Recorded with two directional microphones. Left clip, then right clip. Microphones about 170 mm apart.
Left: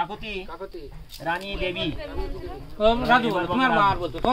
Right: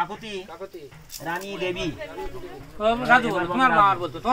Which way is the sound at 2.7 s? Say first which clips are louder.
Even; 75° left (ahead or behind).